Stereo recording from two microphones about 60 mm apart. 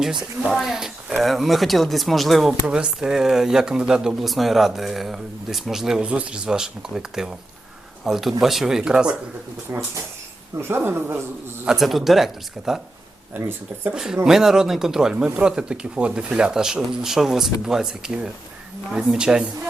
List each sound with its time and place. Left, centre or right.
0.0 s speech: centre
2.6 s speech: centre
4.2 s speech: centre
6.0 s speech: centre
9.7 s speech: right
11.8 s speech: centre
13.9 s speech: centre